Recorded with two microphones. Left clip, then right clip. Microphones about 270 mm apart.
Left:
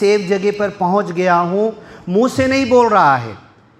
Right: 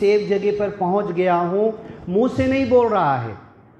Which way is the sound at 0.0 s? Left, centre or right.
Left.